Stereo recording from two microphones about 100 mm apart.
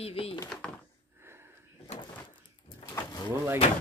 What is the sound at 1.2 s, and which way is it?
Sniff, 25° right (ahead or behind).